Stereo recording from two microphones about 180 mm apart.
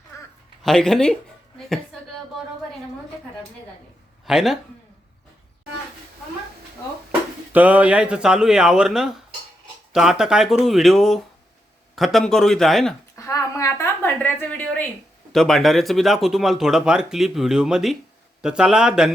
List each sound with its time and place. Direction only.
0.1 s a sound: 15° left (ahead or behind)
0.6 s speech: centre (ahead or behind)
4.3 s speech: centre (ahead or behind)
7.5 s speech: 10° right (ahead or behind)
13.1 s a woman's voice: 20° left (ahead or behind); by 19.1 s 5° right (ahead or behind)